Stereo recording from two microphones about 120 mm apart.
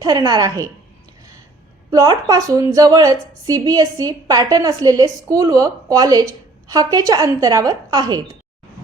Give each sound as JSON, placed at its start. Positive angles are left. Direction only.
{"t": 0.0, "sound": "a woman's voice", "side_deg": -35}
{"t": 1.9, "sound": "a woman's voice", "side_deg": -30}